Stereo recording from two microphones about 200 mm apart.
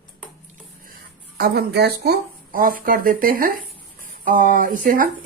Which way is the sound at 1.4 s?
50° right (ahead or behind).